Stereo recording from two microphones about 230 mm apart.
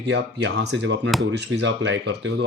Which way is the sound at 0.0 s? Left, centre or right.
Right.